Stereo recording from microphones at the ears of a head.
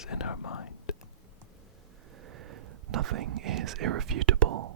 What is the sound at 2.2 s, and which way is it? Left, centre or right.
Whispering, right.